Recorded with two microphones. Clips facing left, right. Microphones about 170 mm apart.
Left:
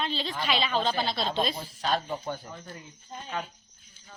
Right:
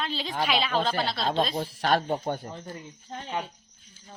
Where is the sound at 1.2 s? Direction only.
60° right (ahead or behind).